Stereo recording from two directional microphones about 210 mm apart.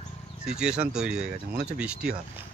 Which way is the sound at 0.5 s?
5° right (ahead or behind).